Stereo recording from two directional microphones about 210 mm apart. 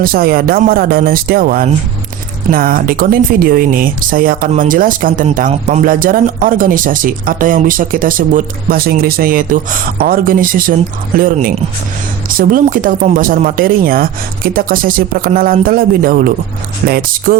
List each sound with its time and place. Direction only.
0.0 s speech: 45° right (ahead or behind)